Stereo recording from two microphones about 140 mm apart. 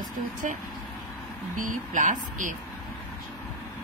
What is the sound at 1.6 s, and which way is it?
Speech, 65° right (ahead or behind).